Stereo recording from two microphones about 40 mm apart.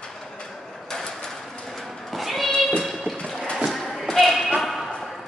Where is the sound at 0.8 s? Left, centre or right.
Centre.